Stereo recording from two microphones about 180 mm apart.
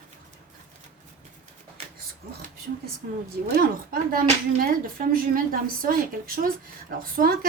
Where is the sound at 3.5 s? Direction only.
55° right (ahead or behind).